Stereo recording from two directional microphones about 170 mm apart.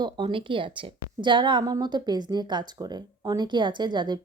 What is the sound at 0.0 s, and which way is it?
A woman's voice, 30° right (ahead or behind).